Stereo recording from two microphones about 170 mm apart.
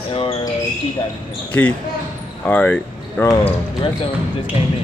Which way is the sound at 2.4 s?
10° left (ahead or behind).